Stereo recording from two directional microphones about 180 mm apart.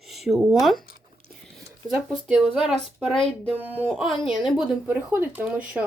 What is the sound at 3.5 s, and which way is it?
Speech, 10° right (ahead or behind).